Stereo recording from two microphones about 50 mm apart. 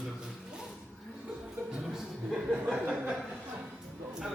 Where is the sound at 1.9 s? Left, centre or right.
Centre.